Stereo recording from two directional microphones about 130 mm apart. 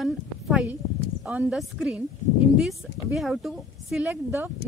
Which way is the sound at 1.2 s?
10° right (ahead or behind).